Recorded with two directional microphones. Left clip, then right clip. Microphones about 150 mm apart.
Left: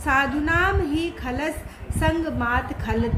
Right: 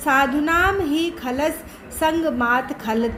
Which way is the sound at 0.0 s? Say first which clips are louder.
Right 3 dB; 40° right (ahead or behind).